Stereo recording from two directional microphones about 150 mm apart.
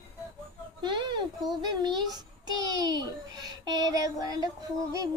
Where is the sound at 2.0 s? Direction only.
25° right (ahead or behind).